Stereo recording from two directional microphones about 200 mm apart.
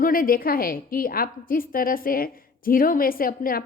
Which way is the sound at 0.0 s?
45° left (ahead or behind).